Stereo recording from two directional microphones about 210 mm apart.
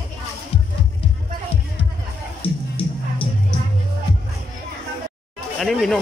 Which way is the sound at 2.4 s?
25° left (ahead or behind).